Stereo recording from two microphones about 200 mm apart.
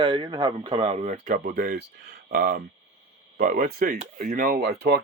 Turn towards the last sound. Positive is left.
turn(degrees=-55)  # may be behind; listen again after turning